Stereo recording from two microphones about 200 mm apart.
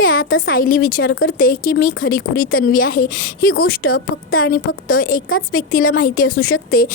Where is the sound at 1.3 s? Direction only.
45° left (ahead or behind).